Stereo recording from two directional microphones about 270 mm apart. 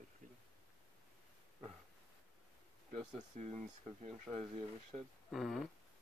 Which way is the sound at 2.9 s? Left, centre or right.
Right.